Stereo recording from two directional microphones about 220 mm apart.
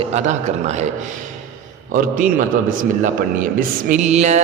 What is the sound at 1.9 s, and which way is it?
Mantra, 35° right (ahead or behind).